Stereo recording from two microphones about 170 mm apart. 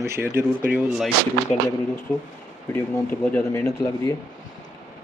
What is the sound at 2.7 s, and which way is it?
A man's voice, 10° left (ahead or behind).